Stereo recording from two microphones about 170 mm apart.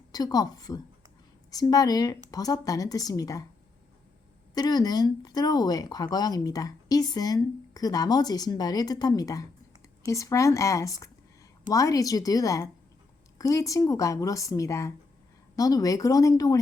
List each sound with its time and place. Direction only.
0.1 s speech: 20° left (ahead or behind)
4.5 s speech: 25° left (ahead or behind)